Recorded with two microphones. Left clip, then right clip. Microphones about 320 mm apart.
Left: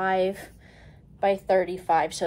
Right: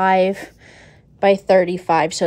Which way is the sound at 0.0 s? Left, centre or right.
Right.